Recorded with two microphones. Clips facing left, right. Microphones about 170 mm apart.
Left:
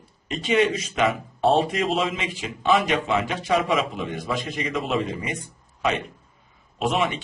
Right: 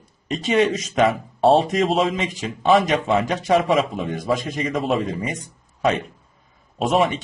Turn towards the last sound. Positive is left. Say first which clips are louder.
# right 4 dB
turn(degrees=-40)  # may be behind; listen again after turning